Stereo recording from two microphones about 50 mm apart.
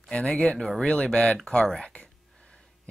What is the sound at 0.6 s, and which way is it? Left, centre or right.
Speech, centre.